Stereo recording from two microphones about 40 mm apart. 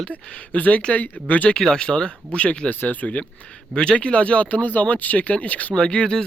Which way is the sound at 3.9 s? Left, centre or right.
Left.